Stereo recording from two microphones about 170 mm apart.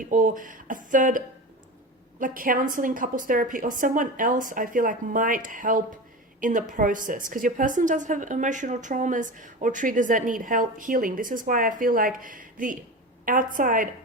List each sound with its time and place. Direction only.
0.0 s a woman's voice: 50° right (ahead or behind)